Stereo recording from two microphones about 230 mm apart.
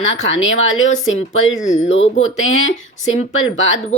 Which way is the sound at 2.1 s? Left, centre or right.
Left.